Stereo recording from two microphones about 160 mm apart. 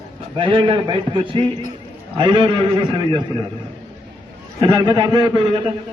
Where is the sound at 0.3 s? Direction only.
30° right (ahead or behind).